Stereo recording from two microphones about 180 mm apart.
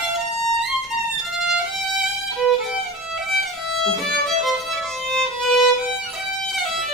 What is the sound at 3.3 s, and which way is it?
Violin, centre (ahead or behind).